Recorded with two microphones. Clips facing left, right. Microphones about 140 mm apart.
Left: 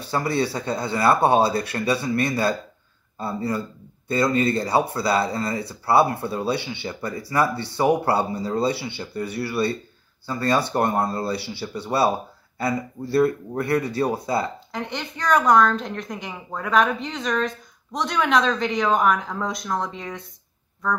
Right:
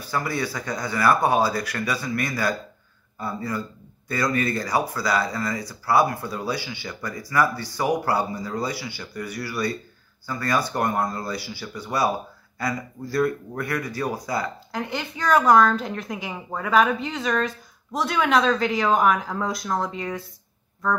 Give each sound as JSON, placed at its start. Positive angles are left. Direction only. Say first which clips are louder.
{"t": 0.0, "sound": "speech", "louder": "left 4 dB", "side_deg": 30}
{"t": 13.1, "sound": "speech", "louder": "left 4 dB", "side_deg": 30}
{"t": 14.7, "sound": "a woman's voice", "louder": "right 1 dB", "side_deg": 0}